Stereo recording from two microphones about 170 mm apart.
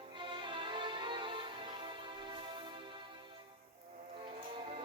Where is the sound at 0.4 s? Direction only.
30° right (ahead or behind).